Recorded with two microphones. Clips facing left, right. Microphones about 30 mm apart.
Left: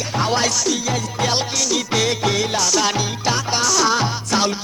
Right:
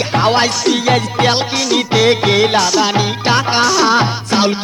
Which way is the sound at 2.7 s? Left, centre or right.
Right.